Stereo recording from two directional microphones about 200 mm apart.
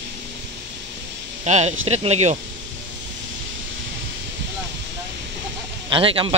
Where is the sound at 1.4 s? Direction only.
35° right (ahead or behind).